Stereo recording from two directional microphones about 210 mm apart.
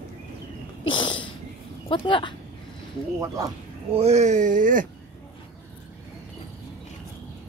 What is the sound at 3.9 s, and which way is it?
Speech, 30° right (ahead or behind).